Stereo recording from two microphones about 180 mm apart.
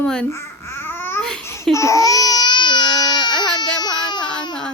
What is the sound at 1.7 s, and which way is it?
Baby cry, 15° left (ahead or behind).